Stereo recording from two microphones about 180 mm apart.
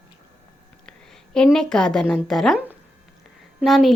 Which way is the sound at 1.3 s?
5° left (ahead or behind).